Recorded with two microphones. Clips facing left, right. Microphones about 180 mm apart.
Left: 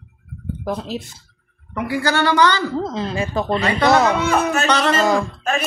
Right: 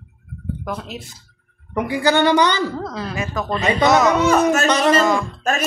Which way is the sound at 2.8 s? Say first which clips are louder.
Left 3 dB; 25° left (ahead or behind).